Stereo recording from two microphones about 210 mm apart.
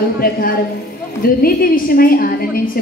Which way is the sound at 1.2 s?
45° left (ahead or behind).